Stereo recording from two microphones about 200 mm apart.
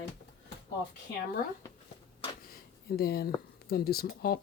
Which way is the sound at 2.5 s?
50° left (ahead or behind).